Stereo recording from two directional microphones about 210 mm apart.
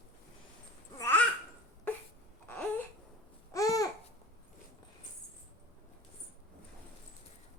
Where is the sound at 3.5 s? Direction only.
15° left (ahead or behind).